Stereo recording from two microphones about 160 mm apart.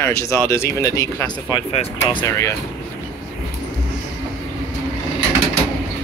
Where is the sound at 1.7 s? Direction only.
40° left (ahead or behind).